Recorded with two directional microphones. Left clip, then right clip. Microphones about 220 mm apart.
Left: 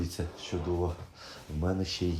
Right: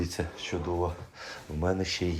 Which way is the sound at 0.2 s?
15° left (ahead or behind).